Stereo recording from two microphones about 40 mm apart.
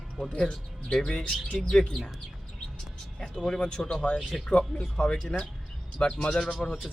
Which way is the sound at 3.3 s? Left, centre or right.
Left.